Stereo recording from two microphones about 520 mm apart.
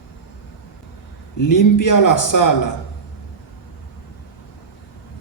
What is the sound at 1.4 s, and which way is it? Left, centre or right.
Speech, left.